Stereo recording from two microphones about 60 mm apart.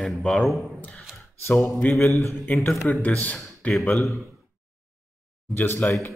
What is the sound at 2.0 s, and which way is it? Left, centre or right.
Speech, left.